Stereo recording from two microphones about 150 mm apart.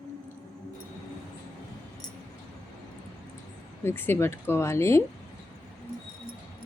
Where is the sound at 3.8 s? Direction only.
15° left (ahead or behind).